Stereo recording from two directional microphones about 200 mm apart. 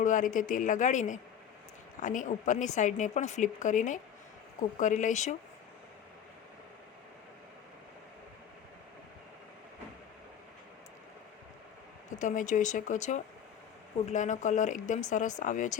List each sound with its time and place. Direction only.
0.0 s a woman's voice: 40° left (ahead or behind)
12.2 s a woman's voice: 40° left (ahead or behind)